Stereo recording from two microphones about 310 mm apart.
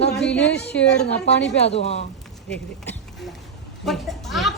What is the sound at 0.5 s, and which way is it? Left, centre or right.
Speech, left.